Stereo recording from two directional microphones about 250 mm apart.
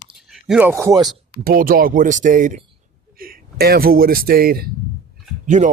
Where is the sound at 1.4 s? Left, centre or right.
Right.